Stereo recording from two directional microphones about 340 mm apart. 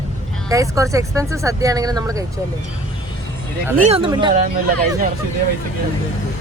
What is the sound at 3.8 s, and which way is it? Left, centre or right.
Speech, centre.